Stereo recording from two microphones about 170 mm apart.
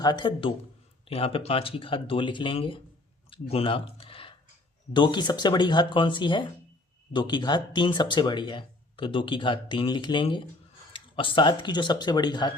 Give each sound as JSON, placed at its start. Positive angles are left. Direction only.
{"t": 0.0, "sound": "speech", "side_deg": 25}
{"t": 3.2, "sound": "a sound", "side_deg": 30}
{"t": 4.9, "sound": "speech", "side_deg": 25}